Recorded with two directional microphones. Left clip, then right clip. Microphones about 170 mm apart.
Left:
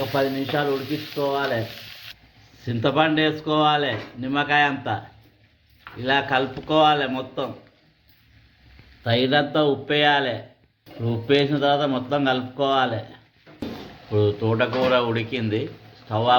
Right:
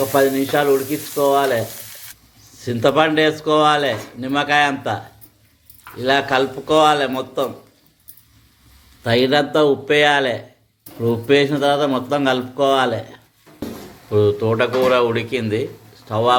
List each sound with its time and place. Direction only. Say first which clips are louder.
0.1 s speech: right 7 dB; 25° right (ahead or behind)
2.6 s speech: right 5 dB; 30° right (ahead or behind)
9.0 s a man's voice: right 4 dB; 25° right (ahead or behind)